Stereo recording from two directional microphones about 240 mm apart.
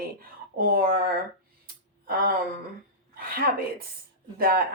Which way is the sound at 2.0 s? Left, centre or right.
Right.